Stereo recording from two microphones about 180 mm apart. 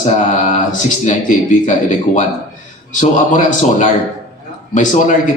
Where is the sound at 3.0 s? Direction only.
45° left (ahead or behind).